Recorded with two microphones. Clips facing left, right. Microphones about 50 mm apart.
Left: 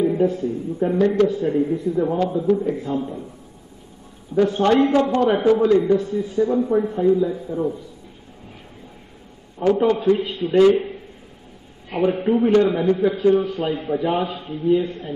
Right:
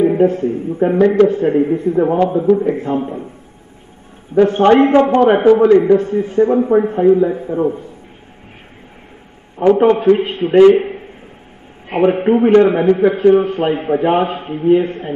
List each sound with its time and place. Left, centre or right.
0.0 s a man's voice: right
0.9 s a man's voice: right
1.2 s a man's voice: right
4.3 s a man's voice: right
9.8 s a man's voice: right